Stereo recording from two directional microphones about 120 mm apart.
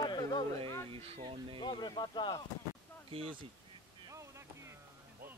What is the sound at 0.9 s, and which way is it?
Speech, 55° right (ahead or behind).